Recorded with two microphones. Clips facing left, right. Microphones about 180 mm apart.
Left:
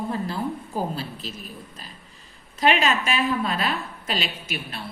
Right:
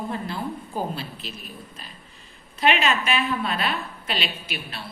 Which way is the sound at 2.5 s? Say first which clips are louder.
Left 1 dB; 40° left (ahead or behind).